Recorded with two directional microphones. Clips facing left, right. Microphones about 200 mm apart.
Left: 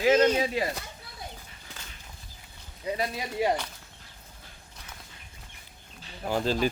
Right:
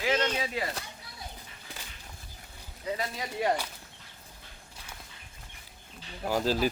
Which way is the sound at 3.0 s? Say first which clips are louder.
Left 5 dB; 15° left (ahead or behind).